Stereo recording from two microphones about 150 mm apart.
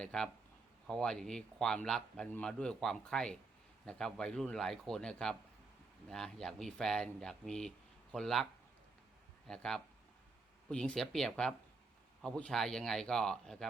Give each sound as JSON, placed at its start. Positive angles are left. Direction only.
{"t": 0.0, "sound": "a man's voice", "side_deg": 5}
{"t": 9.5, "sound": "a man's voice", "side_deg": 5}